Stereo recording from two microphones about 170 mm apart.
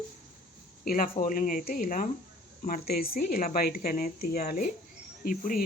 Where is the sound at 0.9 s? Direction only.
55° left (ahead or behind).